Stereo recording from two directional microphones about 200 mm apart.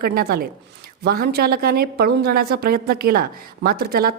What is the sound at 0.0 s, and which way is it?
A woman's voice, 50° right (ahead or behind).